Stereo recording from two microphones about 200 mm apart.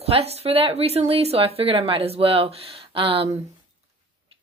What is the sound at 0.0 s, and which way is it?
Speech, 30° right (ahead or behind).